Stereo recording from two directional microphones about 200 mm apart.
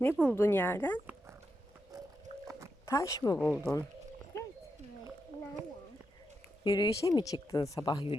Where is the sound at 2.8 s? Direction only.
15° left (ahead or behind).